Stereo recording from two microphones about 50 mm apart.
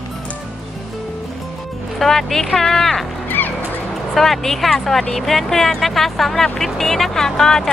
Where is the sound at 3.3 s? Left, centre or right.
Left.